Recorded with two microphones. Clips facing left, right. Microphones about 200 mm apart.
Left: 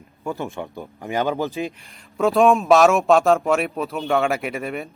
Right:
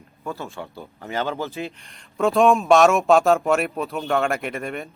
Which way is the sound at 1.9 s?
Centre (ahead or behind).